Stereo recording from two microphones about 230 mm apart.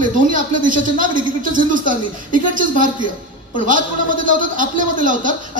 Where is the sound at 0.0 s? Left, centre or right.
Right.